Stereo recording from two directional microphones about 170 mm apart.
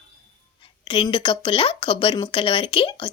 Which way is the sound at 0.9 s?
30° left (ahead or behind).